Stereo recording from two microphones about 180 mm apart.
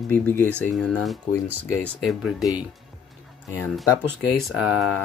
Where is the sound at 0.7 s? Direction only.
Centre (ahead or behind).